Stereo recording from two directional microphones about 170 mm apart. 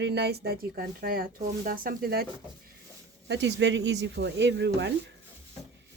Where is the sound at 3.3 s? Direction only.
90° right.